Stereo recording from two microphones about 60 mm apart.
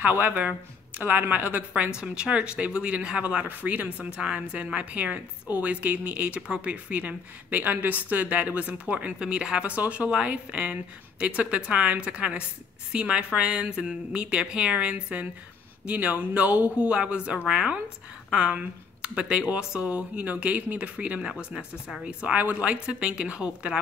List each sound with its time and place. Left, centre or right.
0.1 s speech: right
9.2 s a woman's voice: centre
22.4 s a woman's voice: right